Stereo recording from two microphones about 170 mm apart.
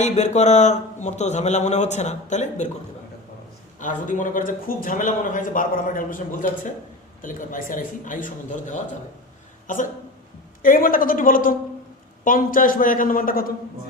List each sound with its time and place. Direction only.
0.0 s a man's voice: 40° left (ahead or behind)
3.8 s a man's voice: 50° left (ahead or behind)